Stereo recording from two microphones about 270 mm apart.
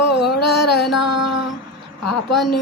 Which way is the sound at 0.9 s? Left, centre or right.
Left.